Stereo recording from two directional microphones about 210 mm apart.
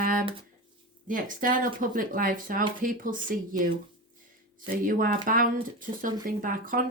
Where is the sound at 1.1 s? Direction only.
40° right (ahead or behind).